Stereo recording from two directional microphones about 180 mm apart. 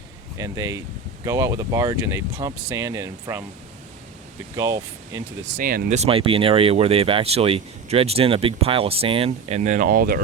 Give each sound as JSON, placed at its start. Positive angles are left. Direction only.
{"t": 0.3, "sound": "speech", "side_deg": -20}
{"t": 4.5, "sound": "speech", "side_deg": -20}
{"t": 5.5, "sound": "speech", "side_deg": -55}
{"t": 5.9, "sound": "speech", "side_deg": -35}